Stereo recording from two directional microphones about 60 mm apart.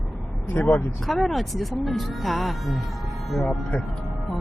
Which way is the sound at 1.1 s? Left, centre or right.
Centre.